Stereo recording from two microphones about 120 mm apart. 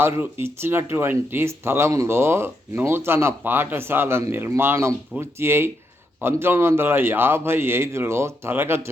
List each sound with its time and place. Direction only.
0.0 s speech: 20° right (ahead or behind)